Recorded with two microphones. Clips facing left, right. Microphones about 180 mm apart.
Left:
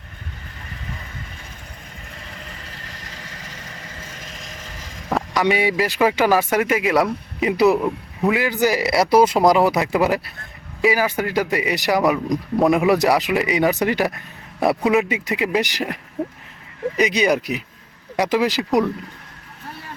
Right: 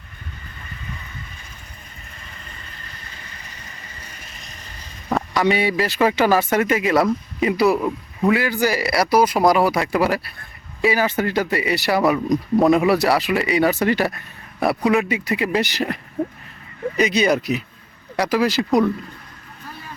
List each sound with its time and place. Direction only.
2.5 s vehicle: 90° left
5.3 s speech: 15° left (ahead or behind)
7.8 s a man's voice: 5° left (ahead or behind)
8.3 s a man's voice: 15° left (ahead or behind)
17.0 s speech: 15° left (ahead or behind)